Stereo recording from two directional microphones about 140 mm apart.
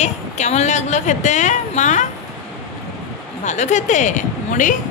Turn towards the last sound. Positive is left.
turn(degrees=65)  # may be behind; listen again after turning